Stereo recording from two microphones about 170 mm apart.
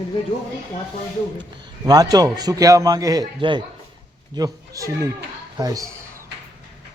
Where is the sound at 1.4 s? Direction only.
20° right (ahead or behind).